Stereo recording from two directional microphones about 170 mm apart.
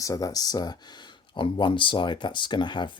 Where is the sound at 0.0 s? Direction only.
20° left (ahead or behind).